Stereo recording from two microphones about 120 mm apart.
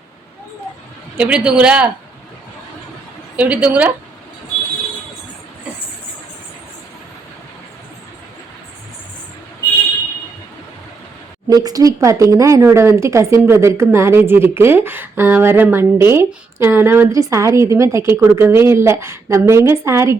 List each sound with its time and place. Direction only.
1.1 s speech: 10° right (ahead or behind)
3.3 s speech: 10° right (ahead or behind)
11.4 s speech: 30° right (ahead or behind)